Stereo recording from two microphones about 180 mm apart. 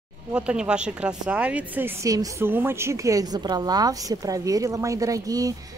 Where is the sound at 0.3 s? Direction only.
5° right (ahead or behind).